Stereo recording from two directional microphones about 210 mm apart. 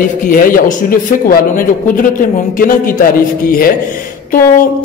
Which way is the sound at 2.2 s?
40° left (ahead or behind).